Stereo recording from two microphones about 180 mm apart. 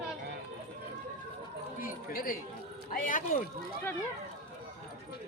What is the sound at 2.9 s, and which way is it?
Speech, 50° left (ahead or behind).